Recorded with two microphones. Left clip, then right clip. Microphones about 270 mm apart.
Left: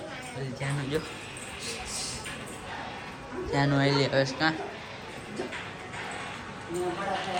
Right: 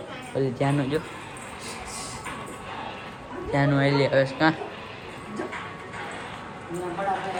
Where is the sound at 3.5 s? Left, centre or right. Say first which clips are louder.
Right 3 dB; centre.